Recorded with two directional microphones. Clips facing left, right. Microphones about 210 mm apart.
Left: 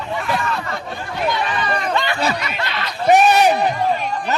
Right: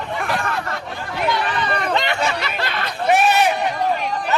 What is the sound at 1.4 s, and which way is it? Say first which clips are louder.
Run: even; 55° right (ahead or behind).